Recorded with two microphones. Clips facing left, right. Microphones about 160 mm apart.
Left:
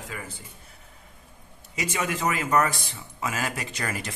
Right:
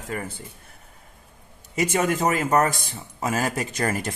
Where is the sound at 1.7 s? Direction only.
50° right (ahead or behind).